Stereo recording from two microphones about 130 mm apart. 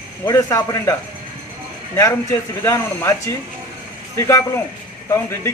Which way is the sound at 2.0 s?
25° left (ahead or behind).